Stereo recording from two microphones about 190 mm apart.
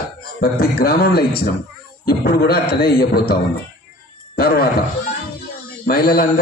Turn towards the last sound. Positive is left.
turn(degrees=50)  # may be behind; listen again after turning